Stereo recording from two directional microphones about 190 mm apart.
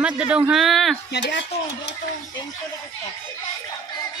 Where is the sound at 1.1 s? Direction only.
60° left (ahead or behind).